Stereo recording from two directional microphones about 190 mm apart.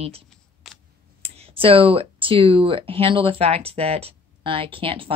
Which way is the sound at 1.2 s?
30° right (ahead or behind).